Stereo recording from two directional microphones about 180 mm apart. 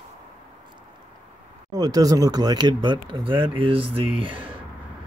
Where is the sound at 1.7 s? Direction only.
20° right (ahead or behind).